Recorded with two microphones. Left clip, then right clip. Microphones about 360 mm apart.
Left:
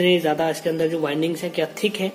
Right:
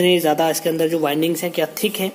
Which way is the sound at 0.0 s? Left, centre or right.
Centre.